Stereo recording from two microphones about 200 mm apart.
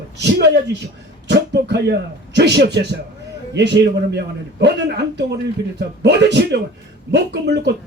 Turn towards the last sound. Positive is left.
turn(degrees=-60)  # may be behind; listen again after turning